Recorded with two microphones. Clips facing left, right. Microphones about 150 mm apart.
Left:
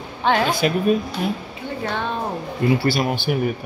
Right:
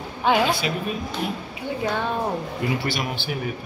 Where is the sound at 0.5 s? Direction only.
45° left (ahead or behind).